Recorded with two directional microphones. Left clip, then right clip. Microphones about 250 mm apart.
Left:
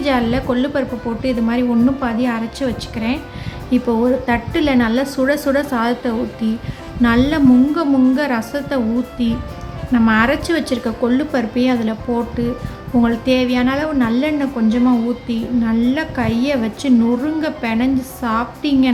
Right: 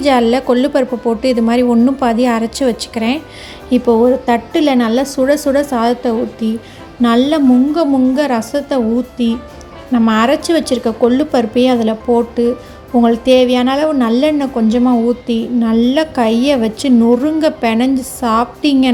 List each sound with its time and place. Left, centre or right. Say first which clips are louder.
0.0 s a woman's voice: right 6 dB; right